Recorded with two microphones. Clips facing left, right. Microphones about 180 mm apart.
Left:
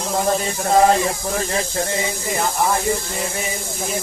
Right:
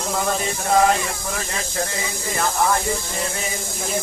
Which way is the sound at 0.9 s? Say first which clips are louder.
Left 5 dB; 35° left (ahead or behind).